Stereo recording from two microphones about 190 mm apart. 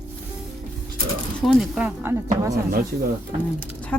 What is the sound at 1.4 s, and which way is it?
Speech, centre (ahead or behind).